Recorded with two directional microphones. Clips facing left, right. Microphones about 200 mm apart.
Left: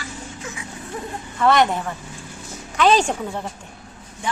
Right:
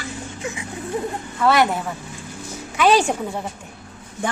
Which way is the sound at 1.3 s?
5° right (ahead or behind).